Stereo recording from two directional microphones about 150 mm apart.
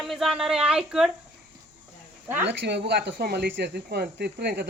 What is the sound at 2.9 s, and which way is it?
Speech, 90° right.